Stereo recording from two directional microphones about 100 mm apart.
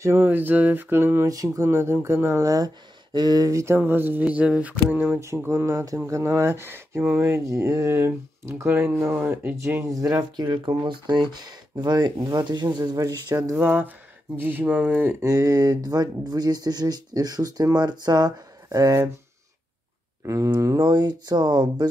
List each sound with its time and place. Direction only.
0.0 s speech: 20° right (ahead or behind)
1.2 s speech: 35° right (ahead or behind); by 5.2 s 15° right (ahead or behind)
5.2 s speech: 30° right (ahead or behind)
9.8 s speech: 35° right (ahead or behind)
13.5 s speech: 20° right (ahead or behind)
15.2 s speech: 35° right (ahead or behind)
20.2 s speech: 30° right (ahead or behind)